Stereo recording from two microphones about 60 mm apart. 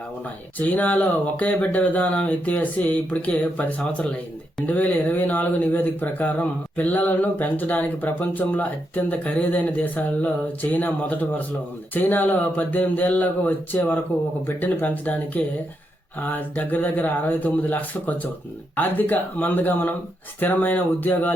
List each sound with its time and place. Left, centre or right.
0.6 s speech: left